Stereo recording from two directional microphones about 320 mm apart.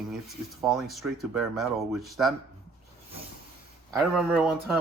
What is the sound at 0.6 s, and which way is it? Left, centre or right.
Speech, centre.